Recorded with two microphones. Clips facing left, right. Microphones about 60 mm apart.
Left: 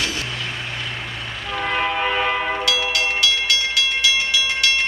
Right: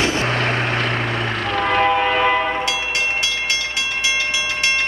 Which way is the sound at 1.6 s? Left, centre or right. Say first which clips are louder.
Right 4 dB; right.